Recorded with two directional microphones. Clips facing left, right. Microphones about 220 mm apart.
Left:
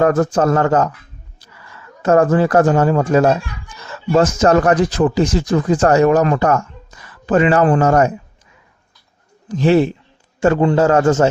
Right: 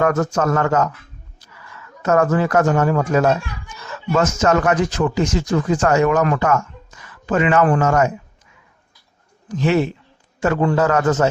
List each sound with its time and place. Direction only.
0.0 s speech: 30° left (ahead or behind)
9.5 s a man's voice: 30° left (ahead or behind)